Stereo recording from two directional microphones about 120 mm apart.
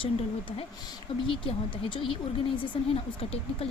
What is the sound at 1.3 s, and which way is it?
Speech, 45° left (ahead or behind).